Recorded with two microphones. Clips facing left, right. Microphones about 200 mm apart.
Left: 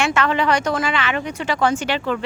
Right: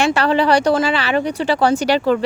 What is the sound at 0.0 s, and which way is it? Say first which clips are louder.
Speech: right 4 dB; 35° right (ahead or behind).